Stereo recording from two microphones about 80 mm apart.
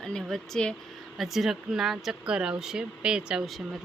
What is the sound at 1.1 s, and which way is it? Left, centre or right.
Speech, centre.